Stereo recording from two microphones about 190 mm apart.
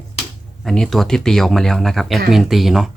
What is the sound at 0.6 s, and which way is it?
Speech, centre (ahead or behind).